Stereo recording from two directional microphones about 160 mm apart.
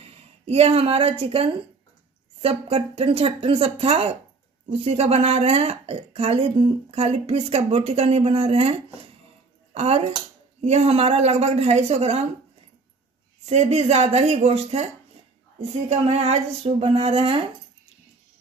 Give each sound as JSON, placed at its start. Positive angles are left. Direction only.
{"t": 0.0, "sound": "a woman's voice", "side_deg": -40}
{"t": 13.5, "sound": "speech", "side_deg": -45}
{"t": 15.9, "sound": "a woman's voice", "side_deg": -40}